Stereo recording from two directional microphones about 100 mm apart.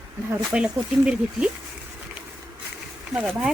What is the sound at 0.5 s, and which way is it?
Speech, 10° right (ahead or behind).